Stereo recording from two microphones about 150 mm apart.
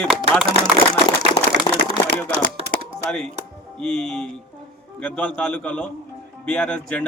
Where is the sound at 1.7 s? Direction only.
25° left (ahead or behind).